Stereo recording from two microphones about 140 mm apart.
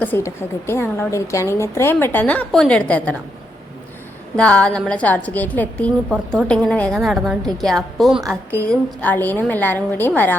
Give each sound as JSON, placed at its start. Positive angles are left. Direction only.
{"t": 0.0, "sound": "a woman's voice", "side_deg": 15}
{"t": 4.4, "sound": "a woman's voice", "side_deg": 10}
{"t": 8.5, "sound": "a woman's voice", "side_deg": 10}